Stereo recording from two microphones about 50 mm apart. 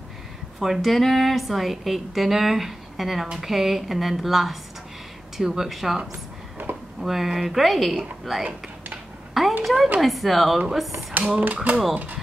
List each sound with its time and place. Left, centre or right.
0.6 s a woman's voice: centre
6.6 s a sound: right
7.0 s a woman's voice: centre
9.3 s a sound: centre
9.9 s a woman's voice: centre
11.4 s mechanisms: right
11.9 s speech: right